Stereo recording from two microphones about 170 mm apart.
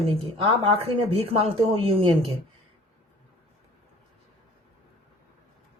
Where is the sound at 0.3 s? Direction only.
30° right (ahead or behind).